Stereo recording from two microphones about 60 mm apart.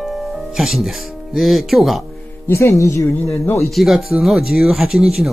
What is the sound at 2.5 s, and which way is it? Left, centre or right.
Speech, left.